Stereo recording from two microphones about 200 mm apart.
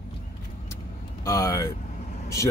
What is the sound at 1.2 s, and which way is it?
Speech, 15° left (ahead or behind).